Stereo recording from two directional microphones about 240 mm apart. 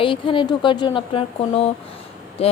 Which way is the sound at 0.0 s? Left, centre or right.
Left.